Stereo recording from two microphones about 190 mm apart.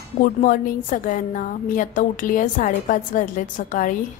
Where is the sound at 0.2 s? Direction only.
45° left (ahead or behind).